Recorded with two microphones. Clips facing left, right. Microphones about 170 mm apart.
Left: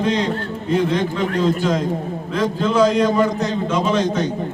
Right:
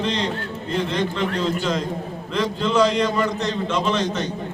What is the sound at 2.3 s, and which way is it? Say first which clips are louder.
A man's voice: left 2 dB; 5° left (ahead or behind).